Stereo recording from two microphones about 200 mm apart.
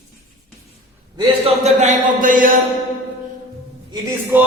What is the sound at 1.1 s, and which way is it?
A man's voice, 30° right (ahead or behind).